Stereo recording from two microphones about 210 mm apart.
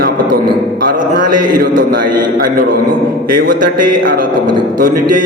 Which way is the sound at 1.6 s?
45° right (ahead or behind).